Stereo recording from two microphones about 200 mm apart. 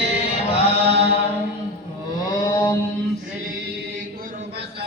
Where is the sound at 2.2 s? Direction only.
20° left (ahead or behind).